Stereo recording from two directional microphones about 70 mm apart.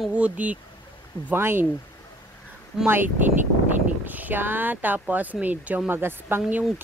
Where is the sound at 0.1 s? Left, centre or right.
Centre.